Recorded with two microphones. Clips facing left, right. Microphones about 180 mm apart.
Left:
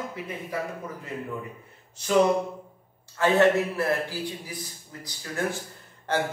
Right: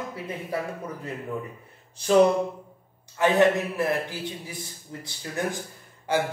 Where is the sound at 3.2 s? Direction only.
15° right (ahead or behind).